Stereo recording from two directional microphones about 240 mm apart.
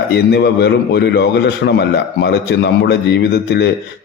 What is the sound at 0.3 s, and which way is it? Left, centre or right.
A man's voice, left.